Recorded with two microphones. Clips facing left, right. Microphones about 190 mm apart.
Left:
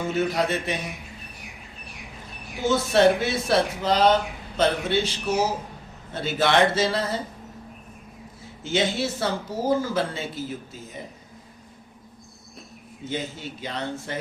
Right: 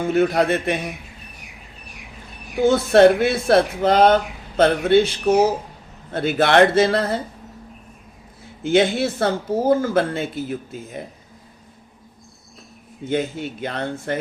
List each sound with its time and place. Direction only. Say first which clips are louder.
0.1 s speech: right 7 dB; 55° right (ahead or behind)
2.6 s speech: right 7 dB; 55° right (ahead or behind)
8.6 s speech: right 7 dB; 55° right (ahead or behind)
13.1 s speech: right 8 dB; 55° right (ahead or behind)